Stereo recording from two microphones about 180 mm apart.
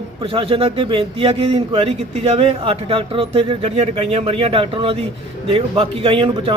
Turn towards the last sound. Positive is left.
turn(degrees=-30)  # may be behind; listen again after turning